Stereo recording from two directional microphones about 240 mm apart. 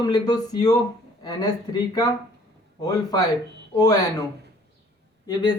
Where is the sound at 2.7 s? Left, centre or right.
Centre.